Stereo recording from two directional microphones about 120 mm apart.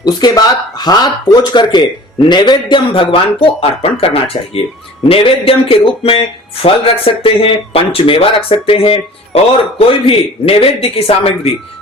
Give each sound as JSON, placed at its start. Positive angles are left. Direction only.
{"t": 0.0, "sound": "speech", "side_deg": 35}